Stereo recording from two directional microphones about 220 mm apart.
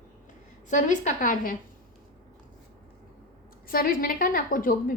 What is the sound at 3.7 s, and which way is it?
A woman's voice, 40° left (ahead or behind).